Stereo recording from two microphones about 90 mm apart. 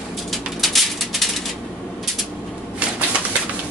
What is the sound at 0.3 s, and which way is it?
Bird, centre (ahead or behind).